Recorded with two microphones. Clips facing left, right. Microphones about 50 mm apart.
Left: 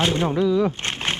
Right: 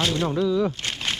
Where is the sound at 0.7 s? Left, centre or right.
Left.